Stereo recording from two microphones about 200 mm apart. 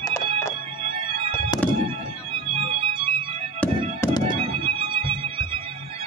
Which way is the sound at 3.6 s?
15° left (ahead or behind).